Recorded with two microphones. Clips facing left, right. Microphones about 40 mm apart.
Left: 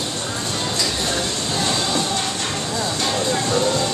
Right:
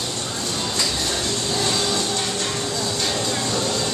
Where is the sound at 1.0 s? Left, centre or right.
Centre.